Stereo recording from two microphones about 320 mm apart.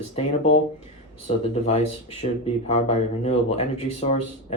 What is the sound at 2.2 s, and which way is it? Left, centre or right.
Speech, left.